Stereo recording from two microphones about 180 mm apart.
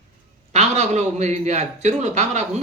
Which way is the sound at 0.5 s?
40° right (ahead or behind).